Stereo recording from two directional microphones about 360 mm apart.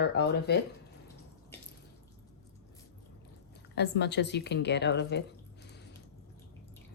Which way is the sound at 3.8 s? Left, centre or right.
Left.